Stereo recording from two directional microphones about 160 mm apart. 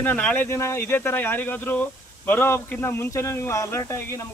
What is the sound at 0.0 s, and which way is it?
Speech, 10° left (ahead or behind).